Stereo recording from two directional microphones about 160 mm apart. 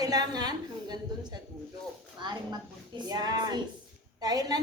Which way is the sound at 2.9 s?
25° right (ahead or behind).